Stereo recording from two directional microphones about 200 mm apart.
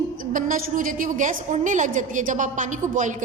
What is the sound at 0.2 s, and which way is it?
A woman's voice, 45° right (ahead or behind).